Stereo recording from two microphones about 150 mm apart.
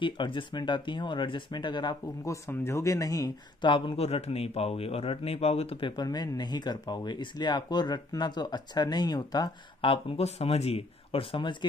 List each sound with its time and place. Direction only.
0.0 s a man's voice: 35° left (ahead or behind)
3.7 s a man's voice: 40° left (ahead or behind)